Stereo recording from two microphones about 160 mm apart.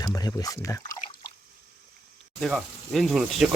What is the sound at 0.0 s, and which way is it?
Speech, 20° left (ahead or behind).